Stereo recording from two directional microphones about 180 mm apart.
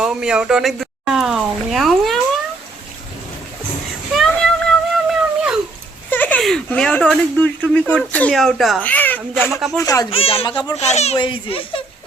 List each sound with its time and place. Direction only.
0.0 s speech: 5° right (ahead or behind)
4.1 s a sound: centre (ahead or behind)
6.1 s speech: 10° left (ahead or behind)
9.5 s speech: centre (ahead or behind)
9.7 s speech: 20° left (ahead or behind)
10.1 s a child's voice: 30° left (ahead or behind)